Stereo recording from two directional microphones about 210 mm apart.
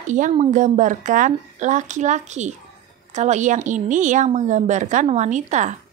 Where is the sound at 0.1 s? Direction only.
35° right (ahead or behind).